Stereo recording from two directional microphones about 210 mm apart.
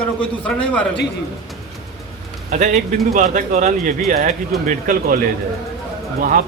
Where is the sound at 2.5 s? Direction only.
35° right (ahead or behind).